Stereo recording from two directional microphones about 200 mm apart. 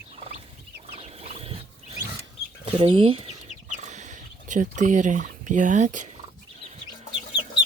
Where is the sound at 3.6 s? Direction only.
35° right (ahead or behind).